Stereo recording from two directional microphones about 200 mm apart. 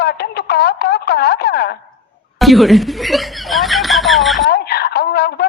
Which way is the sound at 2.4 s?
Centre (ahead or behind).